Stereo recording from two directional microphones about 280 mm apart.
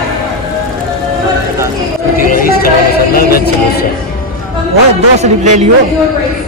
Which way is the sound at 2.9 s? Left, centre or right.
Left.